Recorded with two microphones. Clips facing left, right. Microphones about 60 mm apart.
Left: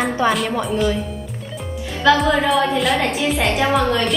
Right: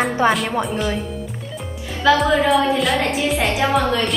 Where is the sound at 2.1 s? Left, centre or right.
Centre.